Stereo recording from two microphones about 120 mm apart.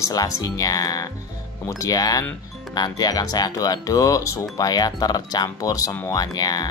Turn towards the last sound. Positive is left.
turn(degrees=35)  # may be behind; listen again after turning